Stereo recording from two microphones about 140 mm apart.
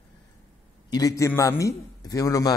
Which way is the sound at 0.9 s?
25° left (ahead or behind).